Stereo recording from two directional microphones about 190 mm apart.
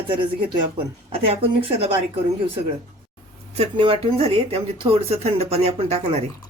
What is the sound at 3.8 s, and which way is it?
Speech, 30° right (ahead or behind).